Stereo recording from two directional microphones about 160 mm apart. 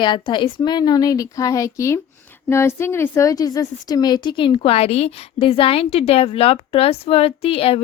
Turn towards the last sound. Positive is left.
turn(degrees=35)  # may be behind; listen again after turning